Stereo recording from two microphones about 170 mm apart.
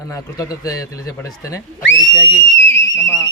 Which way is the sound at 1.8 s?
90° left.